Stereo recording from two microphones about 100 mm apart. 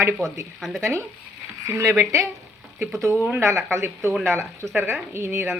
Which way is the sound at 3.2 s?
25° right (ahead or behind).